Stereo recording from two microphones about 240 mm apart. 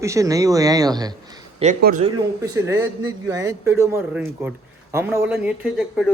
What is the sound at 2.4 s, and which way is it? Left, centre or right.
Speech, centre.